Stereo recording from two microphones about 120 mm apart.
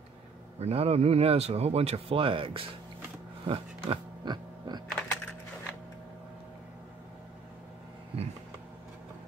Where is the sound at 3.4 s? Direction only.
45° right (ahead or behind).